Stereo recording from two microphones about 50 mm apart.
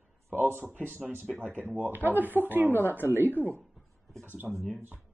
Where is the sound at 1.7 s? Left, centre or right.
Right.